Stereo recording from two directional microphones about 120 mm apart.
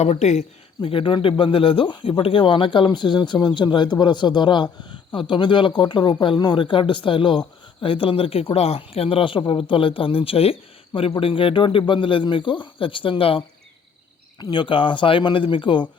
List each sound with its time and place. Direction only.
0.0 s speech: 70° left (ahead or behind)
0.8 s speech: 50° left (ahead or behind)
14.3 s speech: 40° left (ahead or behind)